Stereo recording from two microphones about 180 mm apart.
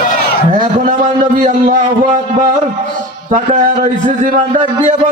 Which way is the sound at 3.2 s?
45° right (ahead or behind).